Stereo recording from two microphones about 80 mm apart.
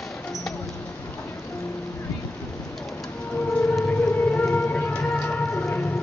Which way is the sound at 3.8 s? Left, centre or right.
Left.